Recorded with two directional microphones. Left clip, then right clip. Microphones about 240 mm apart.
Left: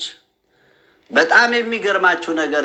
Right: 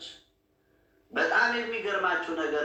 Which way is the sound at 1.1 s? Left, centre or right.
Left.